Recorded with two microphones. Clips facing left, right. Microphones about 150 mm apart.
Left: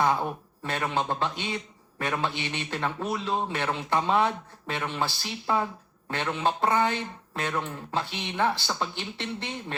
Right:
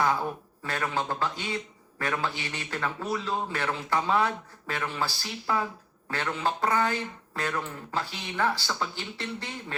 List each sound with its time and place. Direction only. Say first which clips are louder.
0.0 s a man's voice: left 1 dB; 20° left (ahead or behind)